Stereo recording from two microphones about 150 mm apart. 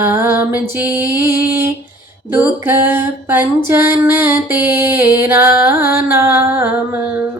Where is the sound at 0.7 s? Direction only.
15° right (ahead or behind).